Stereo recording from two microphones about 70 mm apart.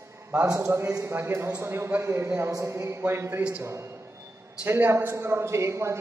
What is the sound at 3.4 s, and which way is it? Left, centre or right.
Speech, centre.